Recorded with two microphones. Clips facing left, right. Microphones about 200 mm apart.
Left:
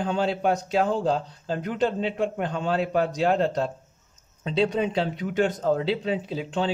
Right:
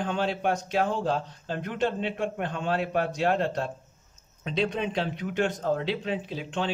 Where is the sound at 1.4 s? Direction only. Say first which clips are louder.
Left 4 dB; 35° left (ahead or behind).